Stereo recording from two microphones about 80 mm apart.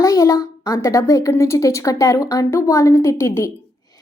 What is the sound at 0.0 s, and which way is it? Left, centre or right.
A woman's voice, left.